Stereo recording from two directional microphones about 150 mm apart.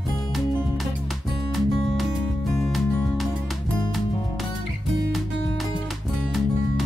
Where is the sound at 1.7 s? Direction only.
40° left (ahead or behind).